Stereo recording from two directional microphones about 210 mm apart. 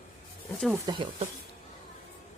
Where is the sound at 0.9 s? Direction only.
25° right (ahead or behind).